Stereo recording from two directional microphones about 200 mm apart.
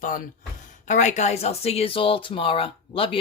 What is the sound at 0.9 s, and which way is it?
A woman's voice, 35° left (ahead or behind).